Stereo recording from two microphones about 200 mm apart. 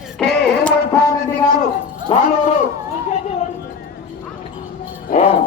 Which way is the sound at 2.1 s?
25° left (ahead or behind).